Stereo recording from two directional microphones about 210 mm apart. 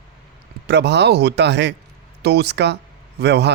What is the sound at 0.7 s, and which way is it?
Speech, 55° right (ahead or behind).